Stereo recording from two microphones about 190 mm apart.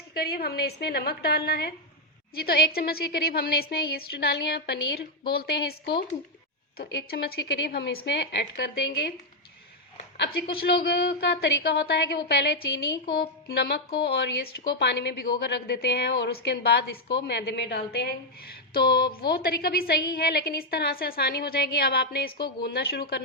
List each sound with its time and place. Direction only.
0.1 s a woman's voice: 55° left (ahead or behind)
10.8 s a woman's voice: 55° left (ahead or behind)